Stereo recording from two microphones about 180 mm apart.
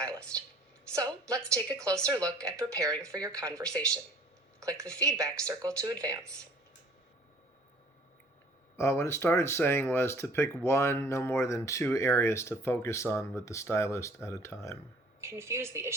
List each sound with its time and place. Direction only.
0.0 s a sound: 5° left (ahead or behind)
0.9 s speech: 15° right (ahead or behind)
8.7 s speech: 15° left (ahead or behind)
15.2 s speech: 15° right (ahead or behind)